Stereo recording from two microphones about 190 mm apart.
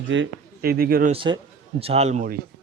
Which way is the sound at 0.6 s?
50° right (ahead or behind).